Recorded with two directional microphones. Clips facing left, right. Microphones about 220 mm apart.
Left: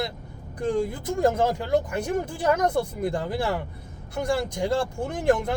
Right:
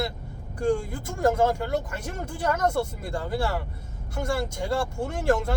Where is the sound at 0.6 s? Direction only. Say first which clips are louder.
Even; 20° left (ahead or behind).